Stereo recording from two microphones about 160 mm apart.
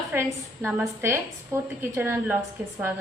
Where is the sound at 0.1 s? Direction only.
15° right (ahead or behind).